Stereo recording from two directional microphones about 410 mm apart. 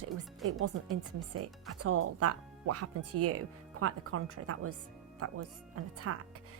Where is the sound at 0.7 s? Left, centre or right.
Right.